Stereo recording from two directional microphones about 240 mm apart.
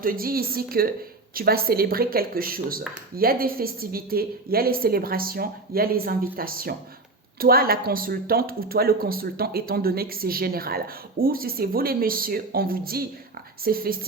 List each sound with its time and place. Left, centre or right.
0.0 s speech: right